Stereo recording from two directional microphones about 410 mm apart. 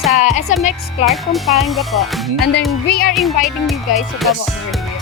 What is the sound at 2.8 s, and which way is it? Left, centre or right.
Speech, left.